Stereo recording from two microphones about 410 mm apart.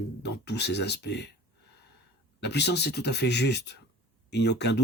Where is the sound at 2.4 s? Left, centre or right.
Left.